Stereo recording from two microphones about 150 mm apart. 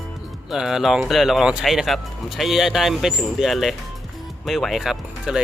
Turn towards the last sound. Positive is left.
turn(degrees=-5)  # may be behind; listen again after turning